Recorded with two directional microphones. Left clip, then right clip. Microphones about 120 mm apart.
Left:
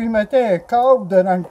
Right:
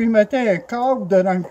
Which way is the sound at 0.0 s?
40° left (ahead or behind).